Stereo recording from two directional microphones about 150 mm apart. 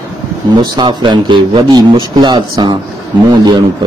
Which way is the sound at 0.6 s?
30° right (ahead or behind).